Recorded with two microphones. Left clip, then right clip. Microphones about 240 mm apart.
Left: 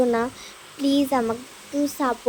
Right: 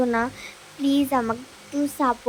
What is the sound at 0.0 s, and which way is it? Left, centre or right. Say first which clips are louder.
Speech: left 2 dB; centre.